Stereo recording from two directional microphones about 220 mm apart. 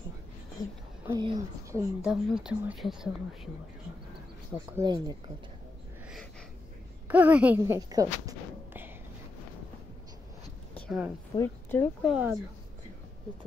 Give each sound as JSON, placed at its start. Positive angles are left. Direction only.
{"t": 1.0, "sound": "a woman's voice", "side_deg": -20}
{"t": 2.0, "sound": "speech", "side_deg": -5}
{"t": 4.7, "sound": "speech", "side_deg": -20}
{"t": 7.1, "sound": "a woman's voice", "side_deg": -5}
{"t": 10.7, "sound": "a sound", "side_deg": 0}
{"t": 11.3, "sound": "speech", "side_deg": 10}